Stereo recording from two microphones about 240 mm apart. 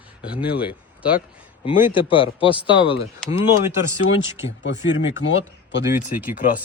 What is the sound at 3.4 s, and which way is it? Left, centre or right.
Speech, centre.